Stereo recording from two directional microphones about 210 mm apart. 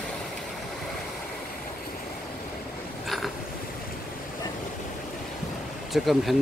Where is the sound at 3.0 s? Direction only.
Centre (ahead or behind).